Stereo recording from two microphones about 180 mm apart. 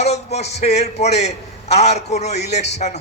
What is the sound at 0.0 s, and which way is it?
A man's voice, 35° left (ahead or behind).